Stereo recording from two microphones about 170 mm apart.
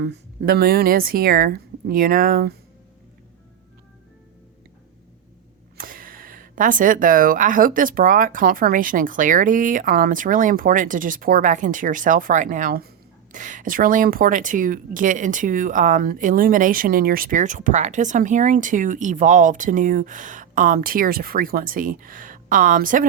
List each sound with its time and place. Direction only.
0.0 s speech: 75° right (ahead or behind)
5.7 s speech: 55° right (ahead or behind)